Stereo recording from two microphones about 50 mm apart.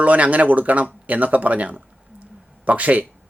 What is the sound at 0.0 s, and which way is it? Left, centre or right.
Speech, right.